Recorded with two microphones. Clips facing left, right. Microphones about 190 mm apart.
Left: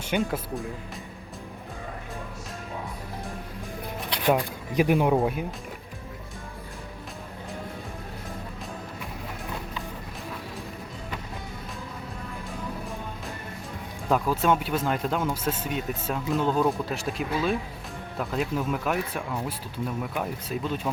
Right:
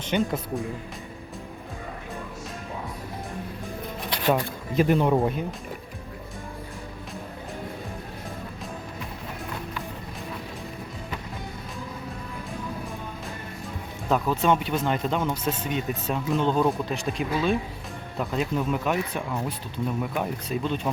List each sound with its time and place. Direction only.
0.0 s speech: 10° left (ahead or behind)
4.2 s speech: 10° left (ahead or behind)
14.1 s speech: 5° left (ahead or behind)